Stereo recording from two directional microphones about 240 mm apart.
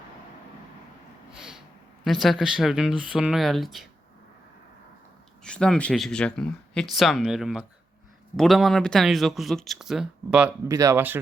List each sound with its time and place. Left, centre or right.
1.4 s a sound: centre
2.0 s speech: centre
5.4 s speech: centre